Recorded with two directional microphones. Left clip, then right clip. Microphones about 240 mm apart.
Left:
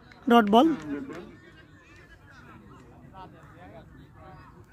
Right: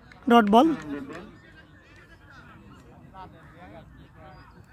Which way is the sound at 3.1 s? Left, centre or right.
Centre.